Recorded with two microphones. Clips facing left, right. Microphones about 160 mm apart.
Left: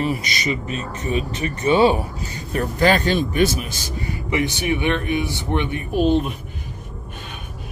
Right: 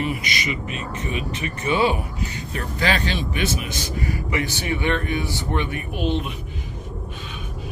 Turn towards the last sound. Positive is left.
turn(degrees=40)  # may be behind; listen again after turning